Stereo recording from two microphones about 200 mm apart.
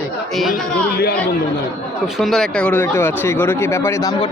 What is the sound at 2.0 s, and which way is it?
Speech, centre (ahead or behind).